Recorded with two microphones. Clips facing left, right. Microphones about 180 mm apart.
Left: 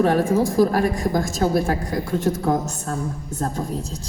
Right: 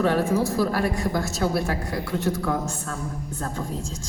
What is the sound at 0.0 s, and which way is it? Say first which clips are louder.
A woman's voice: left 3 dB; 50° left (ahead or behind).